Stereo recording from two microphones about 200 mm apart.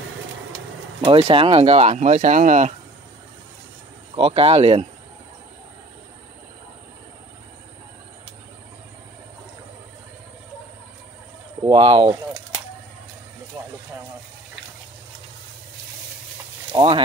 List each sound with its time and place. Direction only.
1.0 s speech: 25° right (ahead or behind)
4.1 s speech: 30° right (ahead or behind)
11.6 s speech: 20° right (ahead or behind)
13.5 s a sound: 15° right (ahead or behind)
16.7 s speech: 25° right (ahead or behind)